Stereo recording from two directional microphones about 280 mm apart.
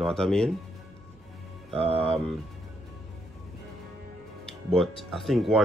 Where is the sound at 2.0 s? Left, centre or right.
Centre.